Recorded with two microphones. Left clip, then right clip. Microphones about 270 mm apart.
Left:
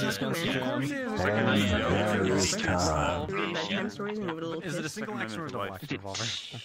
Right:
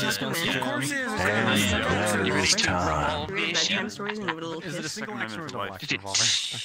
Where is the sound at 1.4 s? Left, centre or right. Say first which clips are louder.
Right 3 dB; centre.